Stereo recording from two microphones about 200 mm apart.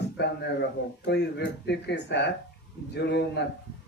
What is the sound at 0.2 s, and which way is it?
Speech, 60° left (ahead or behind).